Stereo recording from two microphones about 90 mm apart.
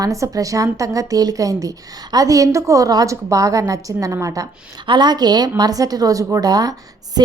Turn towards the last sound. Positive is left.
turn(degrees=-45)  # may be behind; listen again after turning